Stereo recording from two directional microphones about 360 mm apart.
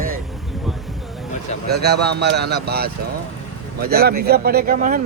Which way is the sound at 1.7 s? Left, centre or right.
Right.